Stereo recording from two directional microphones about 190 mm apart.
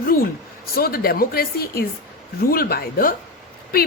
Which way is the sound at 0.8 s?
50° left (ahead or behind).